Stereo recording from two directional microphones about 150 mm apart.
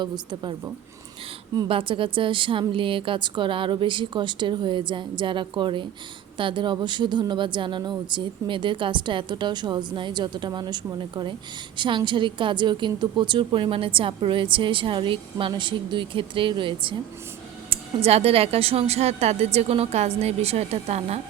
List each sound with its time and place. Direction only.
0.0 s a woman's voice: 30° right (ahead or behind)
1.5 s a woman's voice: 35° right (ahead or behind)
18.0 s a woman's voice: 40° right (ahead or behind)